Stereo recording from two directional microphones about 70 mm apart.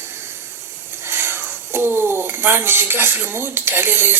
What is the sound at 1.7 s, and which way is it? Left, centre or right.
Speech, right.